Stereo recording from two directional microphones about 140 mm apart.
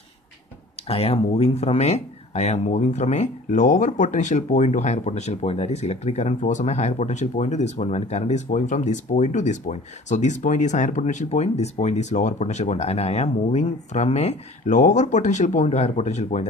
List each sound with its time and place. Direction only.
0.8 s speech: 45° left (ahead or behind)
14.8 s speech: 60° left (ahead or behind)